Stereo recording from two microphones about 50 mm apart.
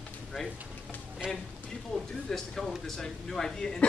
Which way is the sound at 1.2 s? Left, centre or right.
Centre.